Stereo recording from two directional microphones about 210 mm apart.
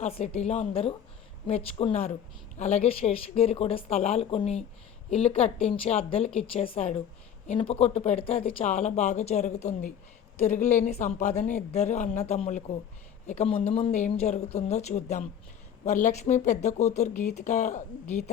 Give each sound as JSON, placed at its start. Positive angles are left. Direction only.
{"t": 0.0, "sound": "a woman's voice", "side_deg": 30}